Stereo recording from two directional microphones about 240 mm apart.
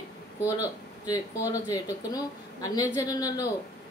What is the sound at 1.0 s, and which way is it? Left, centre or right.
Speech, centre.